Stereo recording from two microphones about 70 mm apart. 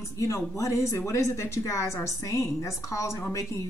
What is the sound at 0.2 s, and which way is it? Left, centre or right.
Speech, left.